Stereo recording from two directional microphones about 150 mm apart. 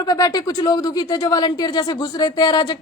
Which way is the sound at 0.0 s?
25° left (ahead or behind).